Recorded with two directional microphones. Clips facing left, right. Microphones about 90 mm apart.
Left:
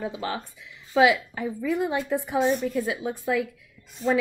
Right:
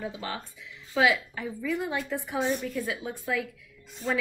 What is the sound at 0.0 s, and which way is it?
Speech, 20° left (ahead or behind).